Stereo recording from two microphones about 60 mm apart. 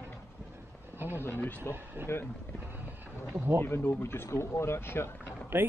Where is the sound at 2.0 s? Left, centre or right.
Right.